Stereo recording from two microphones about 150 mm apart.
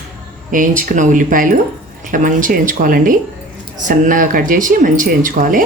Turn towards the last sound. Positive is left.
turn(degrees=-65)  # may be behind; listen again after turning